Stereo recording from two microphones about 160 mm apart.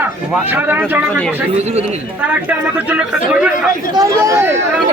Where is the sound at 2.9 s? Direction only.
5° right (ahead or behind).